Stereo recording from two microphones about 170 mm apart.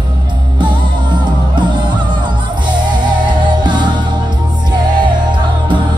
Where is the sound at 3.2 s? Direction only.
25° right (ahead or behind).